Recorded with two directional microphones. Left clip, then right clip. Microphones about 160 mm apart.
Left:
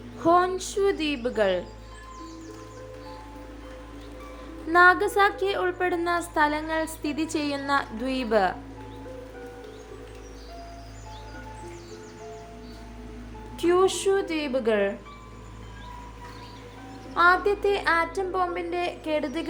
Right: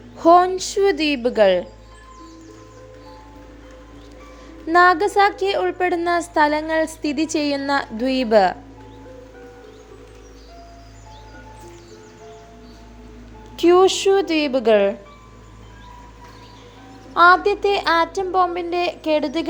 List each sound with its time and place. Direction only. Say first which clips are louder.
0.2 s a woman's voice: right 8 dB; 35° right (ahead or behind)
4.7 s a woman's voice: right 4 dB; 35° right (ahead or behind)
13.6 s a woman's voice: right 8 dB; 35° right (ahead or behind)
17.2 s a woman's voice: right 7 dB; 30° right (ahead or behind)